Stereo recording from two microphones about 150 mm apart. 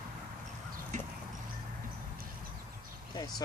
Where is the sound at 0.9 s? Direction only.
55° right (ahead or behind).